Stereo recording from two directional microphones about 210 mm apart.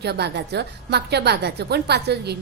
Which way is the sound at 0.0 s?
50° right (ahead or behind).